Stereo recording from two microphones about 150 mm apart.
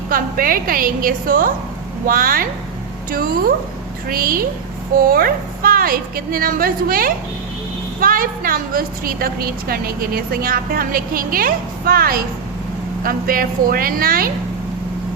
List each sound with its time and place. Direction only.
0.1 s a woman's voice: 70° right (ahead or behind)